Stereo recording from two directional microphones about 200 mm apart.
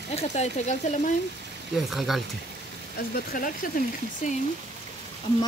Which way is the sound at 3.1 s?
45° left (ahead or behind).